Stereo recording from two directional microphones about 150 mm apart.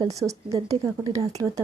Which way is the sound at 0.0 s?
20° right (ahead or behind).